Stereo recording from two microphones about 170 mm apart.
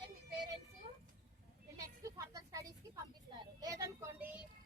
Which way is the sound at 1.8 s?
20° right (ahead or behind).